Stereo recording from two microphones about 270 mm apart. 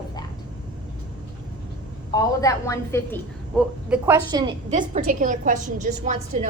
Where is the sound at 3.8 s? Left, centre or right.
Centre.